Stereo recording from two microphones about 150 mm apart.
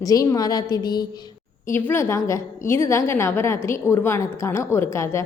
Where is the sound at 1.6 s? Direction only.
15° left (ahead or behind).